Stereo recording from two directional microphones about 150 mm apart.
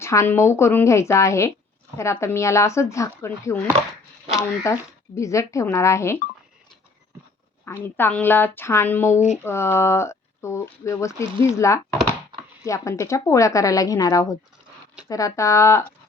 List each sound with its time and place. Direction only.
0.0 s speech: 20° left (ahead or behind)
7.6 s speech: 15° left (ahead or behind)